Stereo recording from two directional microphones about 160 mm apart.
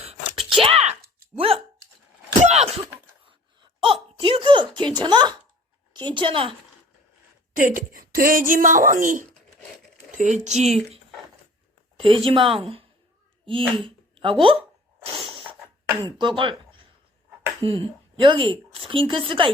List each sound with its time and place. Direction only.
0.6 s a sound: 40° right (ahead or behind)
5.9 s a woman's voice: 30° right (ahead or behind)
7.5 s a woman's voice: 60° right (ahead or behind)
11.9 s a woman's voice: 35° right (ahead or behind)
15.0 s sneeze: 35° right (ahead or behind)
16.0 s a woman's voice: 30° right (ahead or behind)